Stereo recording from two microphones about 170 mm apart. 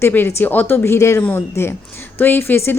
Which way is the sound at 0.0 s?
15° left (ahead or behind).